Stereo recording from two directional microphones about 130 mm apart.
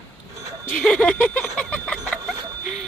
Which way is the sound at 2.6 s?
Centre (ahead or behind).